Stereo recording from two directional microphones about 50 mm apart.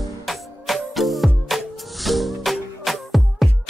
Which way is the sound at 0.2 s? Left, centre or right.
Centre.